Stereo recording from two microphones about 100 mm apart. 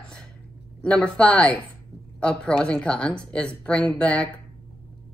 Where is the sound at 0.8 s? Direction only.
10° left (ahead or behind).